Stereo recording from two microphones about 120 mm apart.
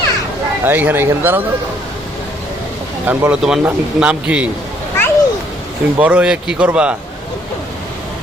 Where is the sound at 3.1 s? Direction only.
15° right (ahead or behind).